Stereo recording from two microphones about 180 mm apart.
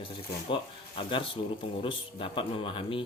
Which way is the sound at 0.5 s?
30° left (ahead or behind).